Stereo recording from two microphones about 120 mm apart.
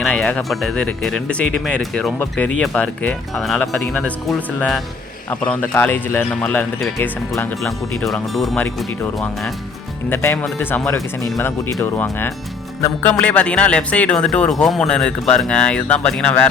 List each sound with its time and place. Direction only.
0.0 s a man's voice: 5° left (ahead or behind)
10.1 s a man's voice: 15° left (ahead or behind)